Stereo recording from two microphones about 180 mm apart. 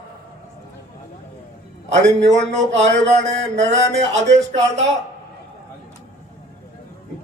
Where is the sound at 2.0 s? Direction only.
80° right.